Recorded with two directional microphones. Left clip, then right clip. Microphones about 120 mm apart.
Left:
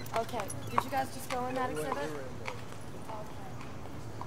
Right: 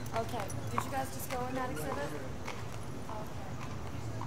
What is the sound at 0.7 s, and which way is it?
Speech, 50° left (ahead or behind).